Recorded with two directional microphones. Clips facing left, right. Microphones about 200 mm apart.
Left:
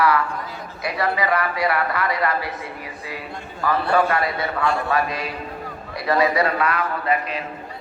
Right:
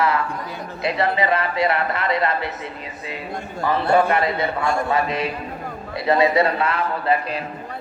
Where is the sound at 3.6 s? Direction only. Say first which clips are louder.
Right 2 dB; 25° right (ahead or behind).